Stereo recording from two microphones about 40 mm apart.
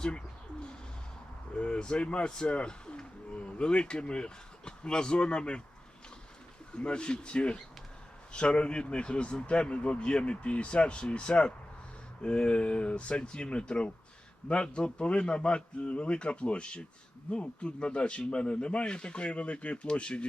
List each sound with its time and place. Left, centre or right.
1.5 s speech: left
6.7 s speech: left